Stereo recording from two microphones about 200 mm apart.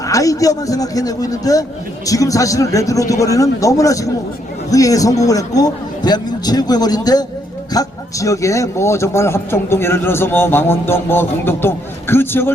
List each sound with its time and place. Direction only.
0.0 s a man's voice: 15° left (ahead or behind)